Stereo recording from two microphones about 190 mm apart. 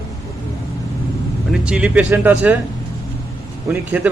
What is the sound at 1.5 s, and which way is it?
A man's voice, 5° right (ahead or behind).